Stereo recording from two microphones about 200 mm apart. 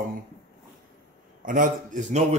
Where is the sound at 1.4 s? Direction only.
40° right (ahead or behind).